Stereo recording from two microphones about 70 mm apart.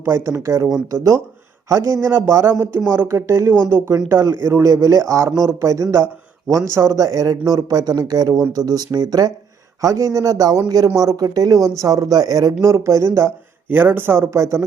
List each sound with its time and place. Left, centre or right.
0.0 s a man's voice: right
2.0 s a man's voice: right
9.8 s a man's voice: right
12.6 s a man's voice: right
13.7 s speech: right